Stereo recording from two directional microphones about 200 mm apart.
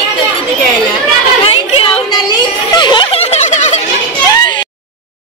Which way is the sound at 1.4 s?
30° left (ahead or behind).